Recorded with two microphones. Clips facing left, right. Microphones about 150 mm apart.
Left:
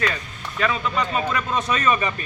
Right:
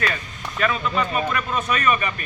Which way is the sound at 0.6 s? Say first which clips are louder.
Right 1 dB; 20° left (ahead or behind).